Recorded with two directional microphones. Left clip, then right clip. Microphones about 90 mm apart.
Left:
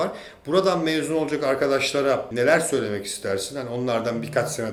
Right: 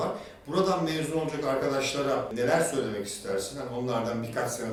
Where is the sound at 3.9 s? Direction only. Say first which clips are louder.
Left 7 dB; 45° left (ahead or behind).